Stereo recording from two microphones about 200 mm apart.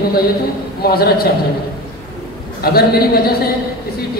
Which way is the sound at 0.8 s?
50° left (ahead or behind).